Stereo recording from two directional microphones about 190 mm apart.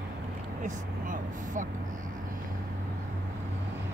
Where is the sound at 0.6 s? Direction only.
45° right (ahead or behind).